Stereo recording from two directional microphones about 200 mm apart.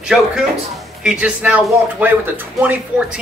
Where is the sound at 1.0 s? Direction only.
5° right (ahead or behind).